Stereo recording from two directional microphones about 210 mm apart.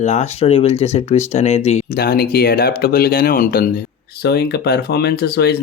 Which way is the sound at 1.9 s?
45° left (ahead or behind).